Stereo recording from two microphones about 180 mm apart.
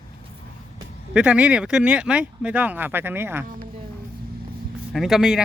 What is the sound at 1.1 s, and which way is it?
Speech, 5° right (ahead or behind).